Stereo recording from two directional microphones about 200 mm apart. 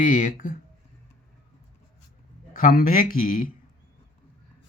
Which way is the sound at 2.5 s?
45° left (ahead or behind).